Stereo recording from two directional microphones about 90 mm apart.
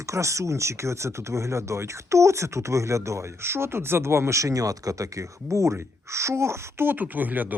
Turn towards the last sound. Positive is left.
turn(degrees=-20)  # may be behind; listen again after turning